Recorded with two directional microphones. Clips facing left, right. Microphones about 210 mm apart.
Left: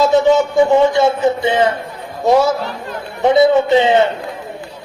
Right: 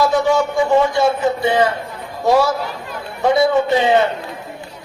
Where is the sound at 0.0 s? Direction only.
20° left (ahead or behind).